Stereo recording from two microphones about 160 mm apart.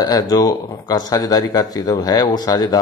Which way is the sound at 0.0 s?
25° left (ahead or behind).